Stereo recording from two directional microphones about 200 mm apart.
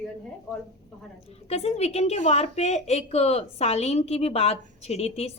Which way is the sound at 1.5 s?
30° left (ahead or behind).